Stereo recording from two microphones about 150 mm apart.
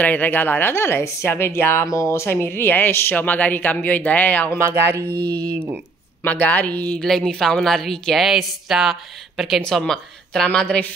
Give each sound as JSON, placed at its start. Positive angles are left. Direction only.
{"t": 0.0, "sound": "speech", "side_deg": 10}
{"t": 4.6, "sound": "a sound", "side_deg": -15}
{"t": 5.1, "sound": "speech", "side_deg": -90}
{"t": 6.2, "sound": "a woman's voice", "side_deg": 10}